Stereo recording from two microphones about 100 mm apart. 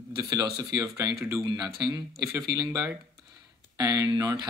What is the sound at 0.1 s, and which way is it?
Speech, 40° right (ahead or behind).